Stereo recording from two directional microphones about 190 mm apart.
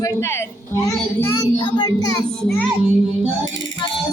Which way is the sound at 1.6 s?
20° left (ahead or behind).